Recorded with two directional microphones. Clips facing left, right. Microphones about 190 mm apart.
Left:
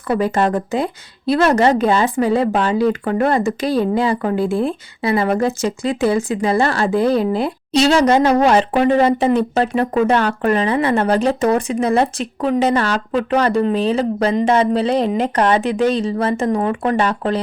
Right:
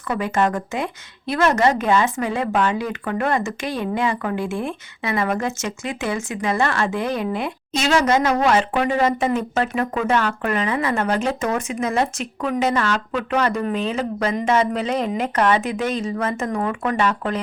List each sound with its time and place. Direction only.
0.1 s speech: 35° left (ahead or behind)